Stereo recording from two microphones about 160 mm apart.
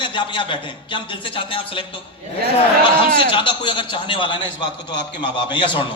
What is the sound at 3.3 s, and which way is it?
A man's voice, 30° left (ahead or behind).